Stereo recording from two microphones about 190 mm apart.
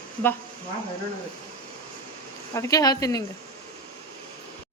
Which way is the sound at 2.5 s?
15° left (ahead or behind).